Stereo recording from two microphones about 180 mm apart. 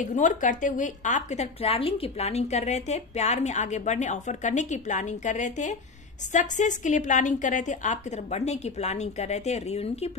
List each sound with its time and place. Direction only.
0.0 s a woman's voice: 45° left (ahead or behind)